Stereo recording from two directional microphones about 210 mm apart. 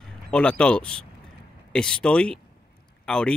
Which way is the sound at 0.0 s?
5° left (ahead or behind).